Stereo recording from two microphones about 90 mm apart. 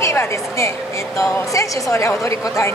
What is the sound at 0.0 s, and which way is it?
A woman's voice, 30° left (ahead or behind).